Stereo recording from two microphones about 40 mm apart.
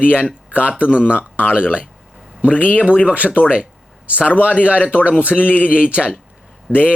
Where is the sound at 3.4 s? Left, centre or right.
Right.